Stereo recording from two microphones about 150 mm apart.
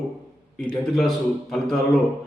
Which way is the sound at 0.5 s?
5° left (ahead or behind).